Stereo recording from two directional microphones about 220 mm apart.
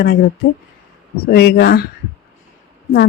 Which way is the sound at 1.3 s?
50° left (ahead or behind).